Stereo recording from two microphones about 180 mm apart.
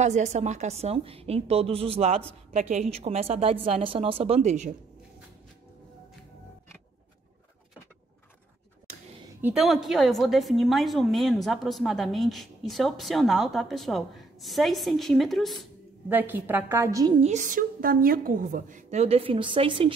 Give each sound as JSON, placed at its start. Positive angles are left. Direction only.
{"t": 0.0, "sound": "a woman's voice", "side_deg": -40}
{"t": 9.4, "sound": "a woman's voice", "side_deg": -5}
{"t": 16.1, "sound": "a woman's voice", "side_deg": -10}
{"t": 17.2, "sound": "a woman's voice", "side_deg": -40}